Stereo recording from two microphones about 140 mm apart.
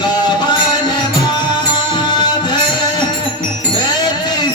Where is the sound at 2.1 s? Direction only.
30° left (ahead or behind).